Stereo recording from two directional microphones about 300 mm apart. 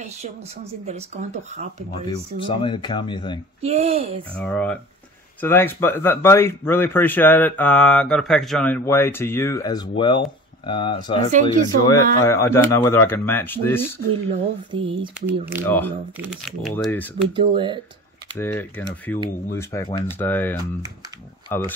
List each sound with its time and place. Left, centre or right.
0.8 s speech: right
2.0 s speech: centre
3.6 s speech: right
4.4 s speech: centre
14.7 s speech: centre
15.6 s speech: centre
17.4 s speech: centre
18.4 s speech: centre